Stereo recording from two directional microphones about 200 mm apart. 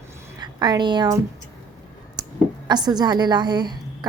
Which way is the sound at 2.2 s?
20° right (ahead or behind).